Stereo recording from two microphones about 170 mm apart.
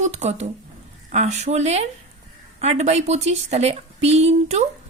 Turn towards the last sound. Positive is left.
turn(degrees=-40)  # may be behind; listen again after turning